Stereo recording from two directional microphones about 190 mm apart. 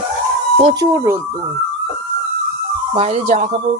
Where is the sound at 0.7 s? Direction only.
15° right (ahead or behind).